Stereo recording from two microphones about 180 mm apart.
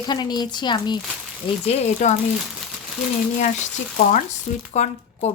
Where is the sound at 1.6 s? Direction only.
40° left (ahead or behind).